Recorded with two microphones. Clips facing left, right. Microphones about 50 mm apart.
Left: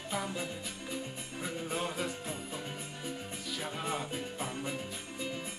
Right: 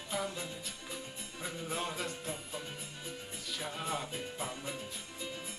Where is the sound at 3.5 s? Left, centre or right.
Centre.